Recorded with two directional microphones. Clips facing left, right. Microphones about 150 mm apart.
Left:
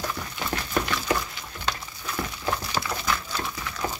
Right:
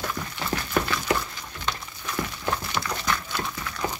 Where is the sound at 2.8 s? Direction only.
40° left (ahead or behind).